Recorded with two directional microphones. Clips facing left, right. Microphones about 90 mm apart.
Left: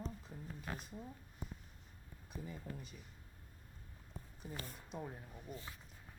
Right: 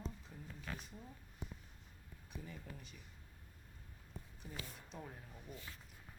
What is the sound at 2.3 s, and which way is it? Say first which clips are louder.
Speech: left 3 dB; 35° left (ahead or behind).